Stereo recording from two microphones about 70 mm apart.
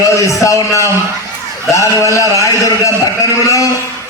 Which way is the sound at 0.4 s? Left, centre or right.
Left.